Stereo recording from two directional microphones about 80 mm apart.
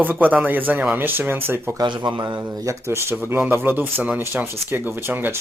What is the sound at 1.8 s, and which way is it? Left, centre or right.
Speech, right.